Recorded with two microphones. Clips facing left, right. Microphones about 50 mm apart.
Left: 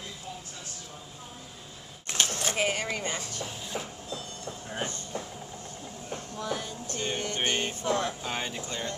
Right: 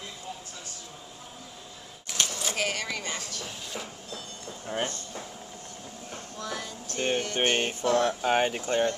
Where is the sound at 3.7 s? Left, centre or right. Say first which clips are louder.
Left 3 dB; centre.